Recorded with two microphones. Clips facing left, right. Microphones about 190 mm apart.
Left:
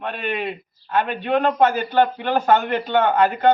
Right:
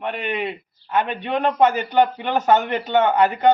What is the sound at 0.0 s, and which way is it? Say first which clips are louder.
A man's voice: right 1 dB; 15° right (ahead or behind).